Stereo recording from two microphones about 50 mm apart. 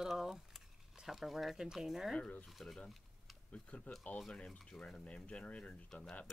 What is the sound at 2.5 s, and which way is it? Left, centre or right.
Speech, centre.